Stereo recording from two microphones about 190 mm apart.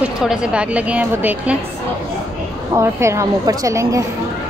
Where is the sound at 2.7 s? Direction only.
15° right (ahead or behind).